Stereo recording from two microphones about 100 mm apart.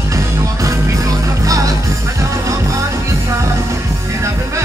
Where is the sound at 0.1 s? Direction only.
30° right (ahead or behind).